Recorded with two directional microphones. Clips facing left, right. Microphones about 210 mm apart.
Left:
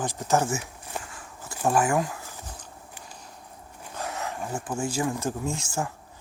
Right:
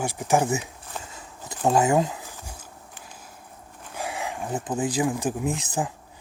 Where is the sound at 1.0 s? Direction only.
20° right (ahead or behind).